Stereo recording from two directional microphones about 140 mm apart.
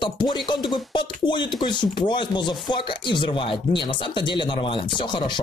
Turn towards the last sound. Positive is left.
turn(degrees=35)  # may be behind; listen again after turning